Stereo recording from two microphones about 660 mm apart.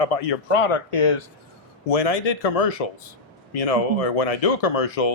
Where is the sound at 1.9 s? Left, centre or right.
Left.